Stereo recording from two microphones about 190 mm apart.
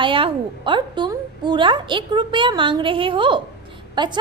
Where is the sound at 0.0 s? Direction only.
25° right (ahead or behind).